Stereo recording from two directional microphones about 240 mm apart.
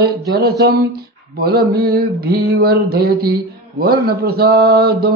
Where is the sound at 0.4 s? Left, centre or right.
Right.